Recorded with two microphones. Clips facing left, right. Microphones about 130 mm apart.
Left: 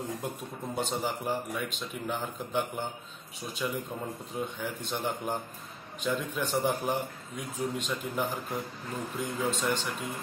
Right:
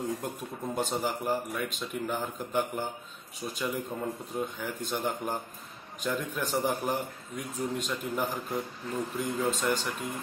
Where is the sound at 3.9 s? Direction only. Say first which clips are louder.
Right 2 dB; 5° left (ahead or behind).